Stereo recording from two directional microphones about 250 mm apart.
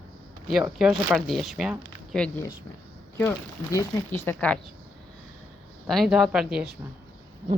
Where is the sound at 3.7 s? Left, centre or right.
Centre.